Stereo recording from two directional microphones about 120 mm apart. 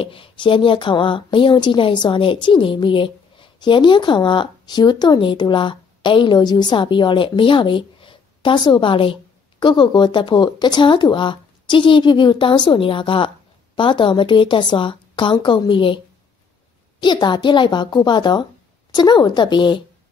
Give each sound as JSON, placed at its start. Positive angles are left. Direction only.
{"t": 0.0, "sound": "a woman's voice", "side_deg": 50}
{"t": 17.0, "sound": "a woman's voice", "side_deg": 40}